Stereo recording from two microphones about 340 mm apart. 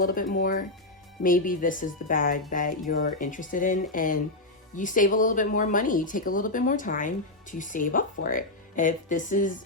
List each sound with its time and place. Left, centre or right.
0.0 s speech: left